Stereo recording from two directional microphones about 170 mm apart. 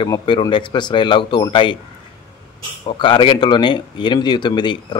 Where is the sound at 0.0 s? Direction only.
25° left (ahead or behind).